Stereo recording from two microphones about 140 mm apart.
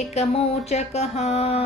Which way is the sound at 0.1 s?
45° left (ahead or behind).